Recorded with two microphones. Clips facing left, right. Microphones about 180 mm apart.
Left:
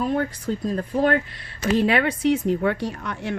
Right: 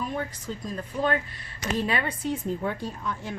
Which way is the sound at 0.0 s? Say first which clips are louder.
Left 8 dB; 70° left (ahead or behind).